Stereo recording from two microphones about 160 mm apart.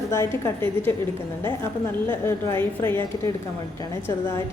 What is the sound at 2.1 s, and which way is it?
A woman's voice, 15° left (ahead or behind).